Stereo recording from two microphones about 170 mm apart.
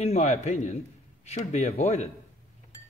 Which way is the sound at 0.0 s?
40° left (ahead or behind).